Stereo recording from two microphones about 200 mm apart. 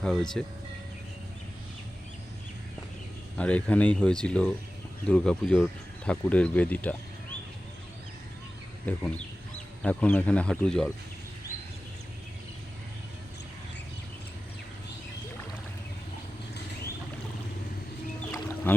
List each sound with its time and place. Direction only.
0.0 s speech: 5° left (ahead or behind)
3.3 s speech: 5° left (ahead or behind)
8.9 s speech: 5° left (ahead or behind)
18.2 s boat: 10° left (ahead or behind)